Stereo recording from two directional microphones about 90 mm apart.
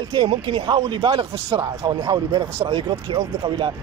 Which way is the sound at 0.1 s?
65° right (ahead or behind).